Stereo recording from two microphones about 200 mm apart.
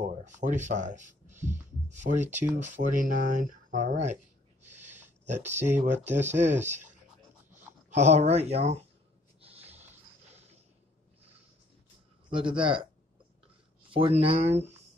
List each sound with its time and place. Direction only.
0.0 s speech: 40° right (ahead or behind)
4.6 s a sound: 35° right (ahead or behind)
5.8 s speech: 35° right (ahead or behind)
7.9 s speech: 35° right (ahead or behind)
9.4 s a sound: 30° right (ahead or behind)
12.3 s speech: 25° right (ahead or behind)
13.8 s speech: 25° right (ahead or behind)